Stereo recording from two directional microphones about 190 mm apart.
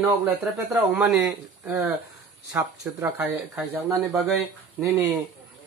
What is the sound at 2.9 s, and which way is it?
Speech, 10° right (ahead or behind).